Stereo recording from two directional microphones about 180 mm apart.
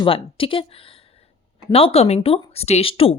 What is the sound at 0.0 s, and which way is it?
Speech, 30° left (ahead or behind).